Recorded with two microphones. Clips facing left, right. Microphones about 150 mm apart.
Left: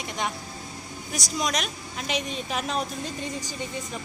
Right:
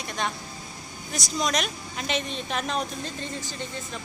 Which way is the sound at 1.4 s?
Centre (ahead or behind).